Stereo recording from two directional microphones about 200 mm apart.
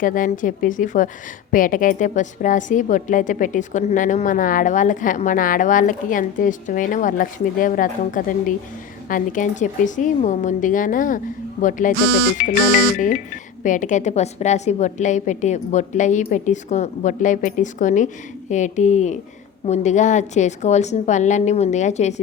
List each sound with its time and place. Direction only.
0.0 s a woman's voice: 40° left (ahead or behind)
13.0 s a woman's voice: 40° left (ahead or behind)